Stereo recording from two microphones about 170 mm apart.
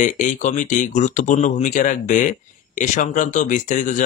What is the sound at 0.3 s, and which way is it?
Speech, 50° left (ahead or behind).